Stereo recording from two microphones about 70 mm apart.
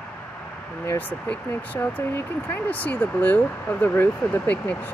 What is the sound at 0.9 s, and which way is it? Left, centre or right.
Speech, left.